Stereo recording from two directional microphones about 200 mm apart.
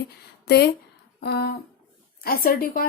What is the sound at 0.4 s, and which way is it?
A woman's voice, 55° left (ahead or behind).